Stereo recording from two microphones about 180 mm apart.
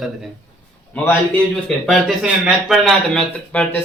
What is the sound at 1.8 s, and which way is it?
Speech, centre (ahead or behind).